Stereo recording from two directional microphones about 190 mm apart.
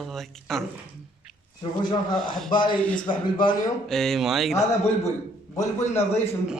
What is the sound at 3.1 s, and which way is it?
Speech, 25° left (ahead or behind).